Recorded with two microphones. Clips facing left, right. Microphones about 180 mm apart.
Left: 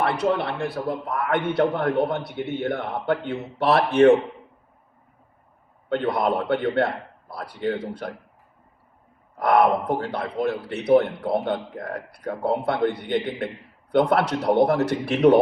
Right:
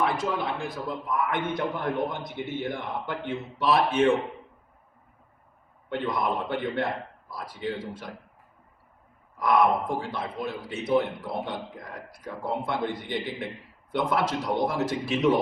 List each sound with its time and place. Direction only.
0.0 s a man's voice: 70° left (ahead or behind)
5.9 s a man's voice: 65° left (ahead or behind)
9.4 s a man's voice: 65° left (ahead or behind)